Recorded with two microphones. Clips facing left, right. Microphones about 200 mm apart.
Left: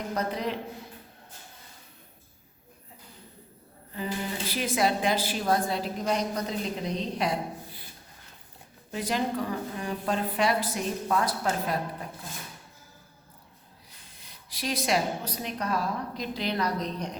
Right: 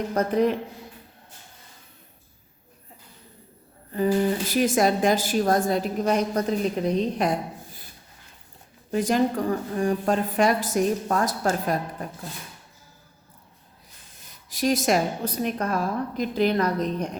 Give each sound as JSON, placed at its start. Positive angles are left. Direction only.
{"t": 0.1, "sound": "a woman's voice", "side_deg": -50}
{"t": 4.6, "sound": "a woman's voice", "side_deg": -45}
{"t": 8.9, "sound": "a woman's voice", "side_deg": -45}
{"t": 14.2, "sound": "a woman's voice", "side_deg": -45}